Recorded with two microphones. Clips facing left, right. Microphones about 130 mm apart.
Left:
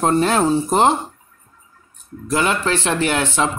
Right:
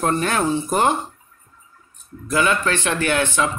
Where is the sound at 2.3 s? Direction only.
30° left (ahead or behind).